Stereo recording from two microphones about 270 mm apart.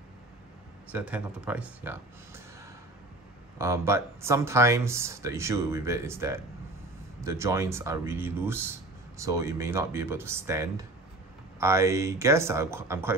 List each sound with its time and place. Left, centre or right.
0.9 s speech: centre
3.5 s speech: centre